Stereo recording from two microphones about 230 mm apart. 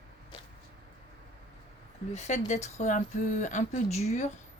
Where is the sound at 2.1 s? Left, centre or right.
Left.